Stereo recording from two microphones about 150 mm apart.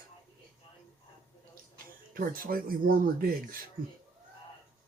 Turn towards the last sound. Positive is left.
turn(degrees=-70)  # may be behind; listen again after turning